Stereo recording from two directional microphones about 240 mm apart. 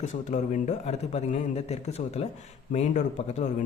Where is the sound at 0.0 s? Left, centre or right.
Left.